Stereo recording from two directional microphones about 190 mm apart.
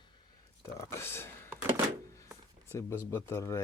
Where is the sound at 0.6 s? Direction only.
15° left (ahead or behind).